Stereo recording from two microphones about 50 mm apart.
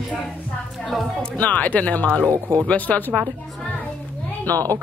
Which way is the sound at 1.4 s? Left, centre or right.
Left.